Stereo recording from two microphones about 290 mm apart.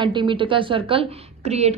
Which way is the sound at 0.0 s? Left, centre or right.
Centre.